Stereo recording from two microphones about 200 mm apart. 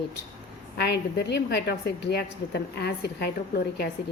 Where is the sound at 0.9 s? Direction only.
55° left (ahead or behind).